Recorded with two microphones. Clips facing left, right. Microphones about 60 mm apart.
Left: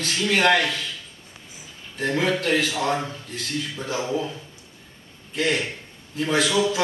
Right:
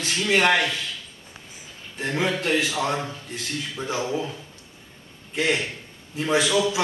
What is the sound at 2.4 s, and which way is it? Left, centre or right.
A man's voice, centre.